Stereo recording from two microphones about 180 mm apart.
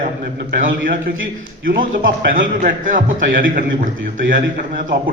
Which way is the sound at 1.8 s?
50° right (ahead or behind).